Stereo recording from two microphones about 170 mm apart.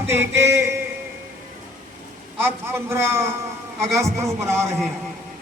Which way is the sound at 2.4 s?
15° right (ahead or behind).